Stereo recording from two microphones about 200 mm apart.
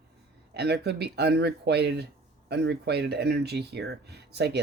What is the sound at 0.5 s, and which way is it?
Speech, 55° right (ahead or behind).